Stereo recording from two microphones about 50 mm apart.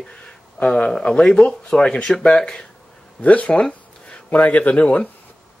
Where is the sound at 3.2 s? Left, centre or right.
Left.